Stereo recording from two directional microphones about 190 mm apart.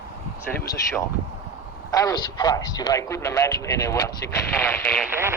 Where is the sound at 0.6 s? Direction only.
20° left (ahead or behind).